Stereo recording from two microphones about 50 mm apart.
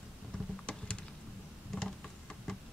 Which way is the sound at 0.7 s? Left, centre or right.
Left.